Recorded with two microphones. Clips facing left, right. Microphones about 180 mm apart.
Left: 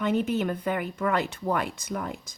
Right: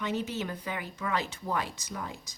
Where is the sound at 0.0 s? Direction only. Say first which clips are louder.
Left 7 dB; 55° left (ahead or behind).